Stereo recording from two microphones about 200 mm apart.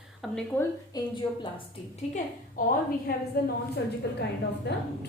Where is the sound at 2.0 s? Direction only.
35° left (ahead or behind); by 3.5 s 50° left (ahead or behind).